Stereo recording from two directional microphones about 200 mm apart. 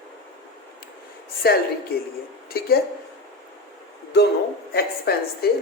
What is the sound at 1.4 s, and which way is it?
Speech, 50° left (ahead or behind).